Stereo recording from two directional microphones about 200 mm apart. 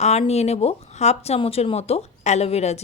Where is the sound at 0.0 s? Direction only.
30° left (ahead or behind).